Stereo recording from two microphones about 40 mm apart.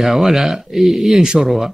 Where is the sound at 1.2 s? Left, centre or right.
Centre.